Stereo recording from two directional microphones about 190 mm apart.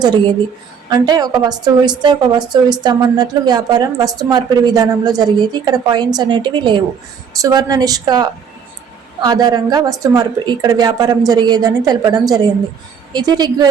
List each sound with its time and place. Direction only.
0.9 s a woman's voice: 20° right (ahead or behind)